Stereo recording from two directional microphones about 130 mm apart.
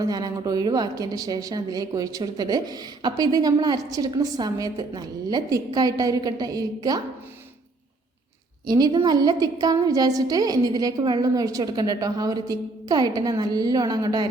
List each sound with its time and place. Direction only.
0.0 s a woman's voice: 30° right (ahead or behind)
8.6 s a woman's voice: 30° right (ahead or behind)